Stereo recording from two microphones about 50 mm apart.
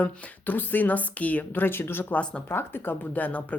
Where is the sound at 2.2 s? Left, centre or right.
Left.